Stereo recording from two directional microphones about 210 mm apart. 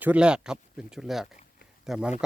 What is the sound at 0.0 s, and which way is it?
Speech, 5° right (ahead or behind).